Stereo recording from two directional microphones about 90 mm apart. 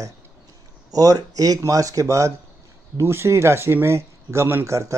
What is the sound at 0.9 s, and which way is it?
Speech, 45° right (ahead or behind).